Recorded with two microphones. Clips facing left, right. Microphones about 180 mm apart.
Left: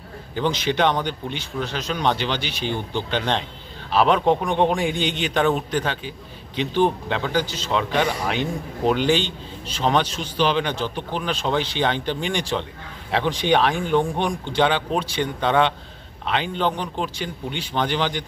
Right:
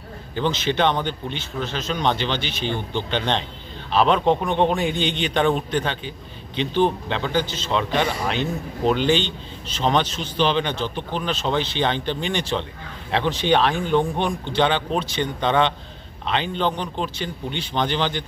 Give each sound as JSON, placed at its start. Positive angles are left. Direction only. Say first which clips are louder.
{"t": 0.4, "sound": "a man's voice", "louder": "even", "side_deg": 10}